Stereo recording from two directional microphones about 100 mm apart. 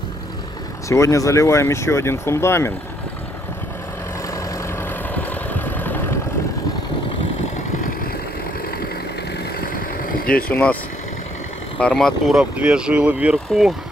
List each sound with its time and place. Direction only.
0.8 s speech: 30° left (ahead or behind)
5.1 s vehicle: 20° left (ahead or behind)
10.5 s speech: 15° left (ahead or behind)
11.8 s speech: 10° left (ahead or behind)
12.3 s speech: 10° right (ahead or behind)